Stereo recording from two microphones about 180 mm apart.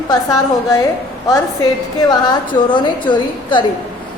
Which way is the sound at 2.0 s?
25° left (ahead or behind).